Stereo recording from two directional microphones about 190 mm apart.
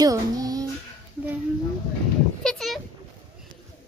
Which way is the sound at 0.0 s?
20° right (ahead or behind).